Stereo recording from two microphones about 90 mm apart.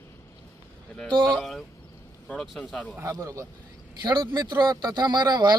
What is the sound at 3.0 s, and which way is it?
Speech, 35° right (ahead or behind).